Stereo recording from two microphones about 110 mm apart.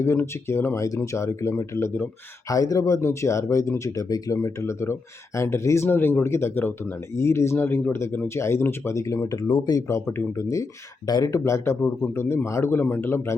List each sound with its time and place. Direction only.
0.0 s speech: 25° left (ahead or behind)
9.4 s speech: 40° left (ahead or behind)
9.9 s speech: 25° left (ahead or behind)